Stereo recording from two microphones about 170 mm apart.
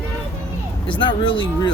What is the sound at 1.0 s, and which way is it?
Speech, 30° left (ahead or behind).